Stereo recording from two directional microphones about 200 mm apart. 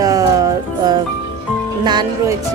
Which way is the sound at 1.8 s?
20° right (ahead or behind).